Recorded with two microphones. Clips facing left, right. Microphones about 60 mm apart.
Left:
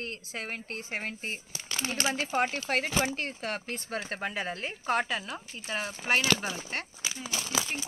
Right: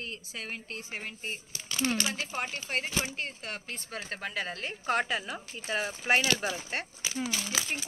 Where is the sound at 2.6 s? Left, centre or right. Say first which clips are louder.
Left 4 dB; left.